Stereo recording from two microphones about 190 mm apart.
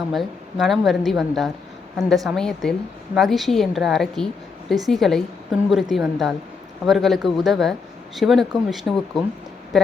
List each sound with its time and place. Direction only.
0.1 s speech: centre (ahead or behind)